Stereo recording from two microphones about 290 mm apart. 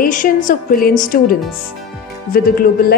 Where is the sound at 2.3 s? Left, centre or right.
Left.